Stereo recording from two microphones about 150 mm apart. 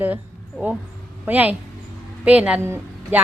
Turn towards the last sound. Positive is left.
turn(degrees=-15)  # may be behind; listen again after turning